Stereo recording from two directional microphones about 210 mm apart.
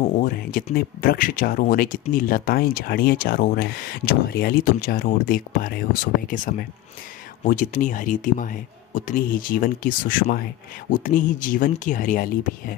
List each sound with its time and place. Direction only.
0.2 s speech: 40° left (ahead or behind)